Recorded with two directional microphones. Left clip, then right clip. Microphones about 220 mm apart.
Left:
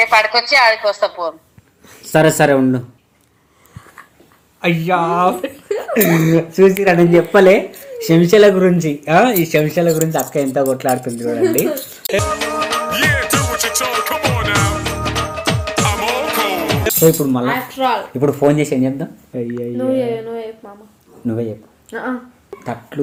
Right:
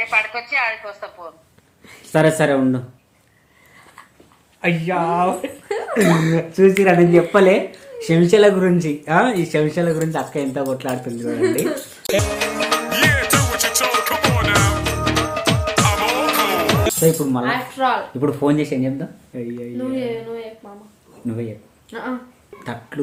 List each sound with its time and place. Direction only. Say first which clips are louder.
0.0 s a woman's voice: left 8 dB; 50° left (ahead or behind)
1.9 s speech: left 3 dB; 20° left (ahead or behind)
4.6 s speech: left 4 dB; 20° left (ahead or behind)
12.5 s music: even; centre (ahead or behind)
17.0 s speech: left 7 dB; 20° left (ahead or behind)
21.9 s speech: left 4 dB; 10° left (ahead or behind)